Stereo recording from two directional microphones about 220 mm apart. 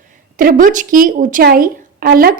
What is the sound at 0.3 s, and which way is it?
A woman's voice, 35° right (ahead or behind).